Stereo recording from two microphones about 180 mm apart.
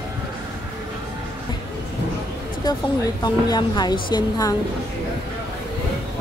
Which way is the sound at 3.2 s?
20° left (ahead or behind).